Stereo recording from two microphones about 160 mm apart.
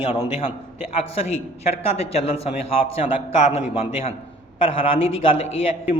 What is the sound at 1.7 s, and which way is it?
A man's voice, 40° left (ahead or behind).